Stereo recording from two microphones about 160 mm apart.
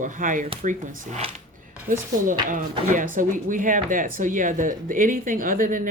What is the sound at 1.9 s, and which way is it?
Speech, 60° right (ahead or behind).